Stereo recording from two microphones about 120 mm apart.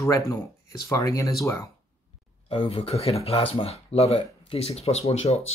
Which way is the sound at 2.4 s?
50° left (ahead or behind).